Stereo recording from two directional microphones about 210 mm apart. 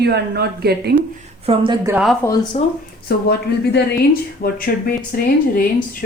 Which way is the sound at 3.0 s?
50° left (ahead or behind).